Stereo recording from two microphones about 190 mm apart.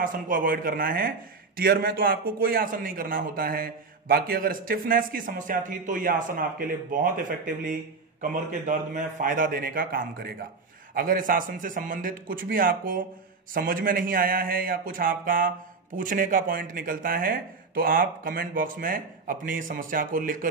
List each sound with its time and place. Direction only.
0.0 s a man's voice: 45° right (ahead or behind)